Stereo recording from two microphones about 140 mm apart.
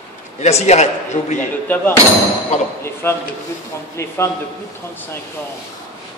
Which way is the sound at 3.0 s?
15° left (ahead or behind).